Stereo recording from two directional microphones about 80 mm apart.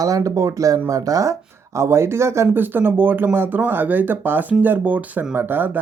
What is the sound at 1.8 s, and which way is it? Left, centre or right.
Speech, right.